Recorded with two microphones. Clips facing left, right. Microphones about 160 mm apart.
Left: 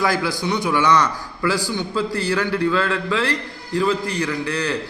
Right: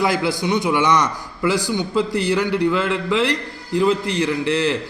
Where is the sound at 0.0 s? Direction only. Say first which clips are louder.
Right 2 dB; 20° right (ahead or behind).